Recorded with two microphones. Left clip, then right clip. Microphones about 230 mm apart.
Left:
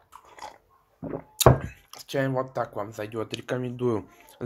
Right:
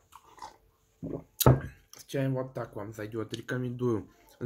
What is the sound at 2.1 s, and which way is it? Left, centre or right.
Speech, centre.